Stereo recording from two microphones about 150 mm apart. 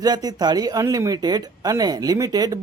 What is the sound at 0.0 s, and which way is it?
Speech, 25° right (ahead or behind).